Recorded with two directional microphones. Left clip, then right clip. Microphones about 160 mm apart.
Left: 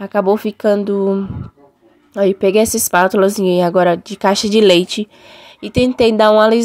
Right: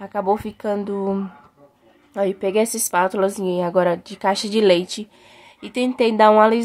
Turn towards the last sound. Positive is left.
turn(degrees=30)  # may be behind; listen again after turning